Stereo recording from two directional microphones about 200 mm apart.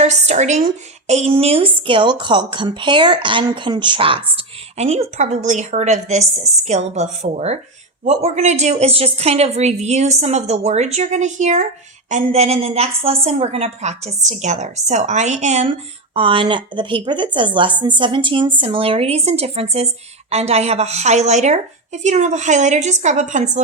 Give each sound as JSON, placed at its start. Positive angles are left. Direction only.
{"t": 0.0, "sound": "a woman's voice", "side_deg": -35}